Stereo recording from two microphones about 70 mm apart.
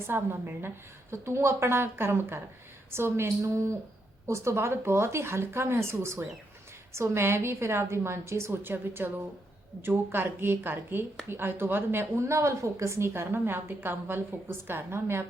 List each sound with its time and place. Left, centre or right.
0.1 s a woman's voice: right